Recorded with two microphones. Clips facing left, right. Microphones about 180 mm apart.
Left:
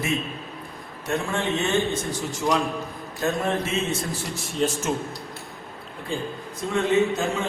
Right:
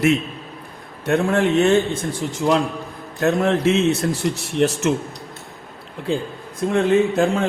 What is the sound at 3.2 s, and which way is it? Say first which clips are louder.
Speech: right 7 dB; 75° right (ahead or behind).